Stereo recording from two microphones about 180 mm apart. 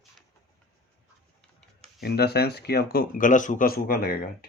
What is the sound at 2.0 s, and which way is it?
Speech, 60° left (ahead or behind).